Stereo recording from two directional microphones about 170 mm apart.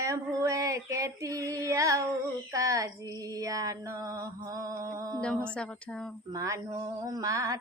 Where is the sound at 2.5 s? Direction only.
20° right (ahead or behind).